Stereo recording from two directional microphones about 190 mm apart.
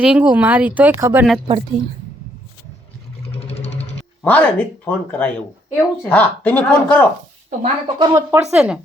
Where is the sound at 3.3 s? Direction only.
35° left (ahead or behind).